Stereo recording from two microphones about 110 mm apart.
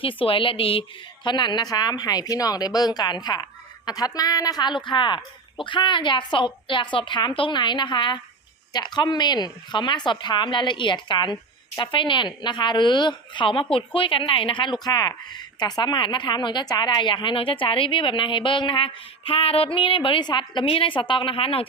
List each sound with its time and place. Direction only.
0.0 s a woman's voice: 55° left (ahead or behind)